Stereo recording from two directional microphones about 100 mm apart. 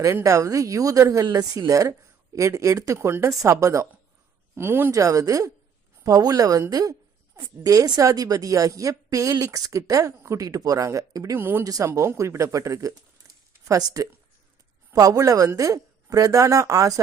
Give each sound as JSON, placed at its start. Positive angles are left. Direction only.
{"t": 0.0, "sound": "a woman's voice", "side_deg": -30}
{"t": 11.3, "sound": "speech", "side_deg": -20}
{"t": 11.6, "sound": "speech", "side_deg": -35}